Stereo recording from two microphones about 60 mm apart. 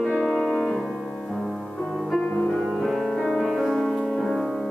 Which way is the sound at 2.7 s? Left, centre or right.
Centre.